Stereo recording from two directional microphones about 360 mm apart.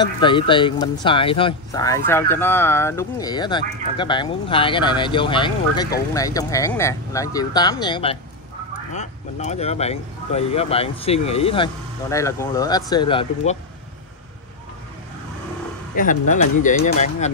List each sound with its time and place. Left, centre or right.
0.0 s speech: centre
16.0 s speech: left